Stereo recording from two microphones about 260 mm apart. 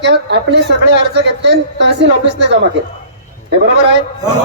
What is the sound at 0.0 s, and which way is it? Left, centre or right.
A man's voice, right.